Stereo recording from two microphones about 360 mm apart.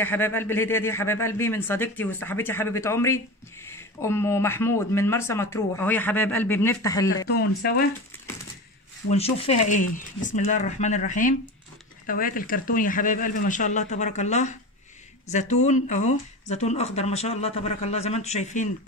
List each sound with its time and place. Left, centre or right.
0.0 s speech: centre
7.2 s speech: left
9.1 s speech: centre